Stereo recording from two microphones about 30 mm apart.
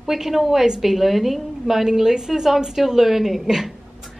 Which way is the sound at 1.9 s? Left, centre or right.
Centre.